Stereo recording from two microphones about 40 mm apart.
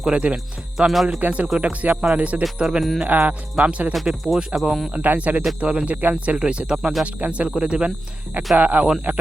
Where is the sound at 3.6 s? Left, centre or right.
Right.